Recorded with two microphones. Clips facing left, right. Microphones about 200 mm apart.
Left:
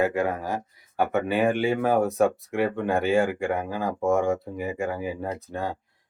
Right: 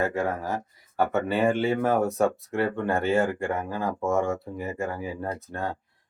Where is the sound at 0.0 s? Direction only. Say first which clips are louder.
Left 2 dB; 15° left (ahead or behind).